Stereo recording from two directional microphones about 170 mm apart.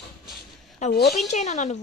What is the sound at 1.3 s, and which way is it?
Speech, 45° left (ahead or behind).